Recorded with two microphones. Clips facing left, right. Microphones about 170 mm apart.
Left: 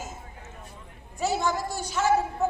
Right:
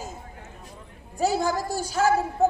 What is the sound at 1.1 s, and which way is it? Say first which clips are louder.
Speech: right 3 dB; 35° right (ahead or behind).